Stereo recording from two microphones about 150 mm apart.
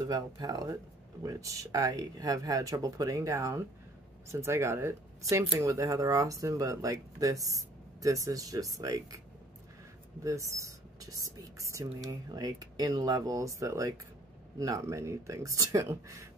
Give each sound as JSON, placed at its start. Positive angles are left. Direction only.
{"t": 0.0, "sound": "speech", "side_deg": -25}
{"t": 10.2, "sound": "speech", "side_deg": -20}